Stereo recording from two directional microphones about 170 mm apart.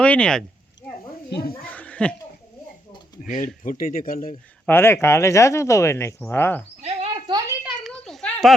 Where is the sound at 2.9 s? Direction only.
25° left (ahead or behind).